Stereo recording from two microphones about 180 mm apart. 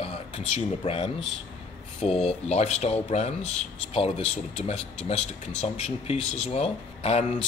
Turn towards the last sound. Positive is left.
turn(degrees=35)  # may be behind; listen again after turning